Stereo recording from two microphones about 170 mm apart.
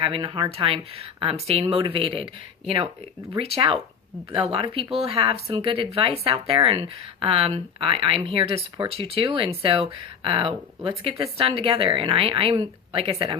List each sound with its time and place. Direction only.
0.0 s a woman's voice: 30° right (ahead or behind)